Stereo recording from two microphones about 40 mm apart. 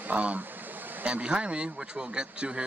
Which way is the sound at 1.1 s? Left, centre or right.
Right.